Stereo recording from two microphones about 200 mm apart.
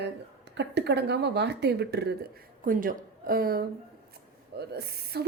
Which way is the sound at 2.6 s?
45° right (ahead or behind).